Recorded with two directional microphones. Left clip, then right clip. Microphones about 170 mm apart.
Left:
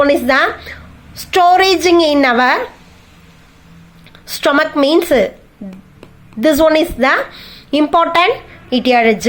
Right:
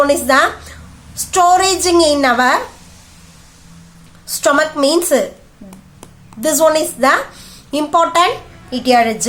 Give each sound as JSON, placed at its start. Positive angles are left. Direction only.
{"t": 0.1, "sound": "a woman's voice", "side_deg": 25}
{"t": 4.3, "sound": "a woman's voice", "side_deg": 25}
{"t": 6.4, "sound": "a woman's voice", "side_deg": 20}